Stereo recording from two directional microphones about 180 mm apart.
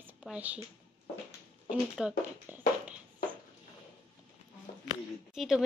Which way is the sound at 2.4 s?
10° right (ahead or behind).